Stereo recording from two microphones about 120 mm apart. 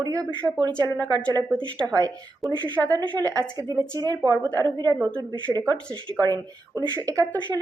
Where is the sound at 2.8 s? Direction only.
30° right (ahead or behind).